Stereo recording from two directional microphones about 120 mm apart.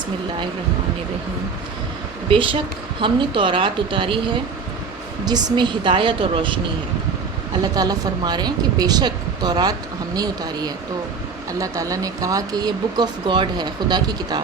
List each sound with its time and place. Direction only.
2.3 s speech: 45° right (ahead or behind)
5.2 s speech: 35° right (ahead or behind)
7.6 s speech: 35° right (ahead or behind)